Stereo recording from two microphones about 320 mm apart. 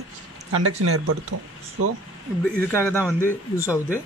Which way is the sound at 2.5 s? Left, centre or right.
Centre.